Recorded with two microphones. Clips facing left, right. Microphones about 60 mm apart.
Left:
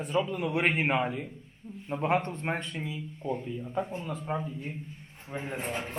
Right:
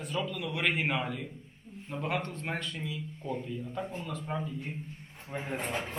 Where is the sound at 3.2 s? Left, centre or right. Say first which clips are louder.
Left 3 dB; centre.